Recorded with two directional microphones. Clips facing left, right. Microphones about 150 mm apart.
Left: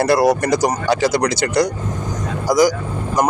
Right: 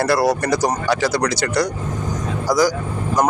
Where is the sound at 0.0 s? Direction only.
20° left (ahead or behind).